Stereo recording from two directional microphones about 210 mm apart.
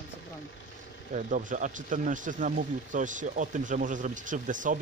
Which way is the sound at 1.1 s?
40° right (ahead or behind).